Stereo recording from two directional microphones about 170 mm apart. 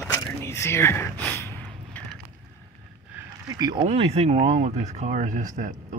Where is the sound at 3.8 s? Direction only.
35° right (ahead or behind).